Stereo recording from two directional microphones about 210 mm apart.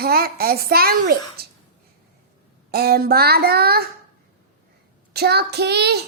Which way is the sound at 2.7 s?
45° right (ahead or behind).